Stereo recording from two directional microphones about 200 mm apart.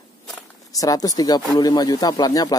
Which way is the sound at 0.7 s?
15° left (ahead or behind).